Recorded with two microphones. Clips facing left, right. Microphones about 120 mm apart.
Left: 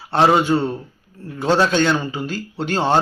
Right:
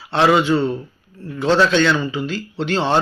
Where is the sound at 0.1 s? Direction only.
40° left (ahead or behind).